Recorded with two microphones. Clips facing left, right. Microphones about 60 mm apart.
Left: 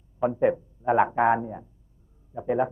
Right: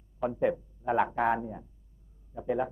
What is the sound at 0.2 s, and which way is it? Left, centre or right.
A man's voice, left.